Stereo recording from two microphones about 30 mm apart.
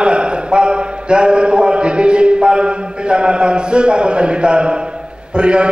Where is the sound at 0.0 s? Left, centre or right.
Right.